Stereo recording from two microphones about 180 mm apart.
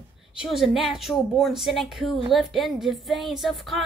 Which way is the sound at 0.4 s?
Centre (ahead or behind).